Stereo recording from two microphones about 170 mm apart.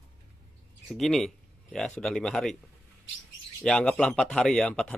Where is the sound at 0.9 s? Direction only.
Centre (ahead or behind).